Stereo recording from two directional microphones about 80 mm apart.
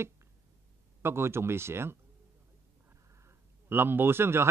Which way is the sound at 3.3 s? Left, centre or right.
Right.